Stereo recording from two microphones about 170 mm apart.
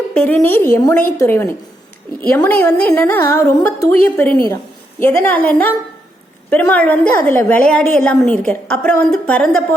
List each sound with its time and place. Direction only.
0.1 s a woman's voice: 5° left (ahead or behind)